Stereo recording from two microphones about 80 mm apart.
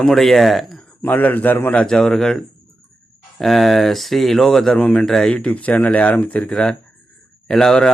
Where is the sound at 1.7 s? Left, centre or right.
Centre.